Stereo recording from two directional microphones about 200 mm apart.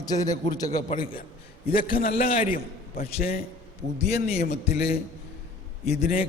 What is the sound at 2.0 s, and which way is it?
A man's voice, 30° left (ahead or behind).